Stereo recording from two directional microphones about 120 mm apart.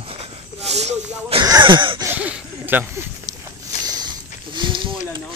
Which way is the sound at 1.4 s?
35° right (ahead or behind).